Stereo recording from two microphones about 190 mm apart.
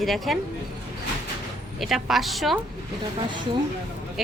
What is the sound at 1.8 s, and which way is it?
Speech, centre (ahead or behind).